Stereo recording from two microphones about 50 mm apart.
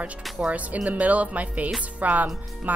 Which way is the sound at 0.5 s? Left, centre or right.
Right.